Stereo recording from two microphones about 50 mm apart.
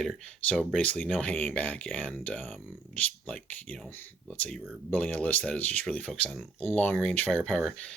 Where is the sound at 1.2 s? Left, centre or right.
Left.